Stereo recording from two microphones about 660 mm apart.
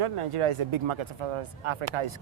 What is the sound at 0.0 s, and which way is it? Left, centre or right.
Speech, right.